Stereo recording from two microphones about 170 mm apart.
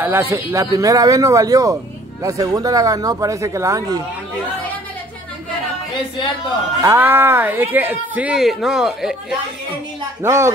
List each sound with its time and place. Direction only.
0.0 s speech: 15° right (ahead or behind)
6.8 s speech: 15° right (ahead or behind)
10.2 s speech: 15° right (ahead or behind)